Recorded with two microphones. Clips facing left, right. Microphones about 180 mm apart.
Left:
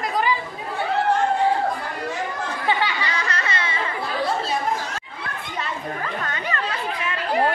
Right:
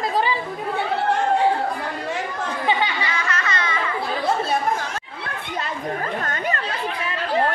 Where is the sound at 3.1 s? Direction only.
35° left (ahead or behind).